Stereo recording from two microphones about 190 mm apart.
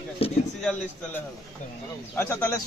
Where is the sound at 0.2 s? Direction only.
30° left (ahead or behind).